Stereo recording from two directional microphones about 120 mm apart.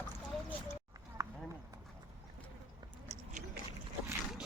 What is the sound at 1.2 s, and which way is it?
Run, 25° right (ahead or behind).